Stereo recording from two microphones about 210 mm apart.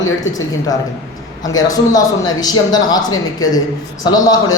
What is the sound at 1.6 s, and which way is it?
A man's voice, 20° left (ahead or behind).